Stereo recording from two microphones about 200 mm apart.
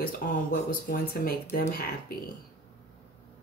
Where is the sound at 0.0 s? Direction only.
45° left (ahead or behind).